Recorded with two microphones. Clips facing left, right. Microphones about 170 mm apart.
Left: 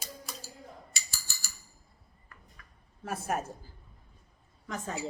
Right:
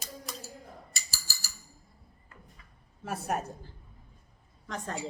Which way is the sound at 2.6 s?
20° right (ahead or behind).